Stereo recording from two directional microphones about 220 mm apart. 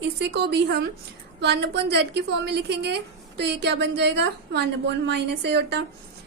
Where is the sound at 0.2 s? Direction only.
50° right (ahead or behind).